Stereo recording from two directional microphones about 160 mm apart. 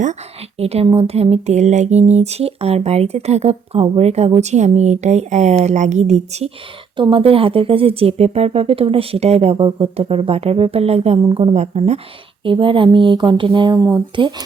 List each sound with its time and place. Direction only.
0.6 s speech: 40° right (ahead or behind)
6.9 s speech: 30° right (ahead or behind)